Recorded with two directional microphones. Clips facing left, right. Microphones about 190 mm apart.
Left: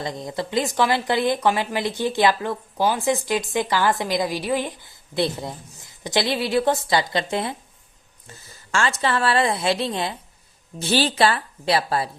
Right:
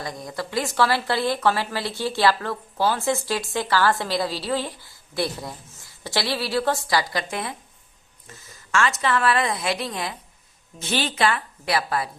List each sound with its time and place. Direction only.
0.0 s a woman's voice: 25° left (ahead or behind)